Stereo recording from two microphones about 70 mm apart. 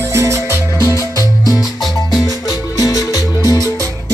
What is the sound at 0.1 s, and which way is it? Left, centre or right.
Music, right.